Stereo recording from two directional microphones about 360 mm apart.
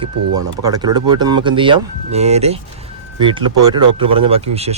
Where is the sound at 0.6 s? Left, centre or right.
Centre.